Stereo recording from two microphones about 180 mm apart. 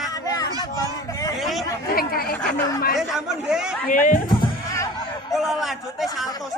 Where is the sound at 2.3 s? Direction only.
10° left (ahead or behind).